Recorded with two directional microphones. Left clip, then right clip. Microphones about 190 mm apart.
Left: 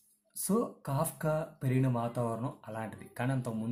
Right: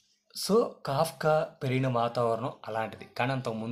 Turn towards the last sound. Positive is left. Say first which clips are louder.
# right 6 dB
turn(degrees=15)  # may be behind; listen again after turning